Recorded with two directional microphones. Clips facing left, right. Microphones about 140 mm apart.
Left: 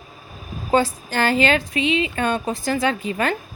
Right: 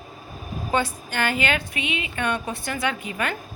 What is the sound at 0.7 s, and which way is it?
A woman's voice, 35° left (ahead or behind).